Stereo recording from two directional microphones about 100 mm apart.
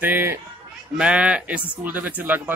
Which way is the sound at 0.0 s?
20° right (ahead or behind).